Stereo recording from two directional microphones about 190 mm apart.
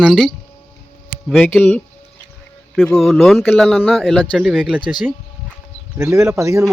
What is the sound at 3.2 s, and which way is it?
Speech, 5° left (ahead or behind).